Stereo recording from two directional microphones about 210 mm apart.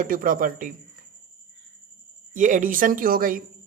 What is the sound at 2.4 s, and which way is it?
Speech, 35° right (ahead or behind).